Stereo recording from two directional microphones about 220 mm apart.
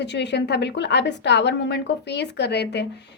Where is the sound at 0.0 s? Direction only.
50° left (ahead or behind).